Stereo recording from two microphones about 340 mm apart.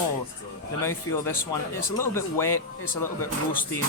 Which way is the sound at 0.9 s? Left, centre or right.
Centre.